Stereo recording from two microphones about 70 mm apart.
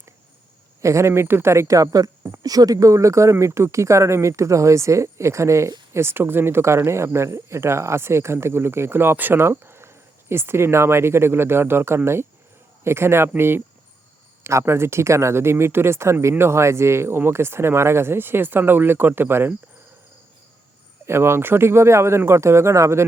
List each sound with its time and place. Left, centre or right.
0.8 s speech: right
21.1 s speech: right